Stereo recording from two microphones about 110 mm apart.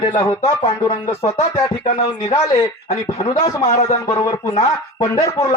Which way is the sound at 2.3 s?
30° left (ahead or behind).